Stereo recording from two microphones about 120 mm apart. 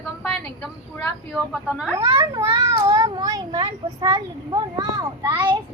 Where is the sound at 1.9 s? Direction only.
25° right (ahead or behind); by 4.2 s 40° right (ahead or behind).